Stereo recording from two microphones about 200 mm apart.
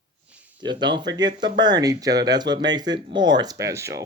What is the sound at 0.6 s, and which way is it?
Speech, 20° right (ahead or behind).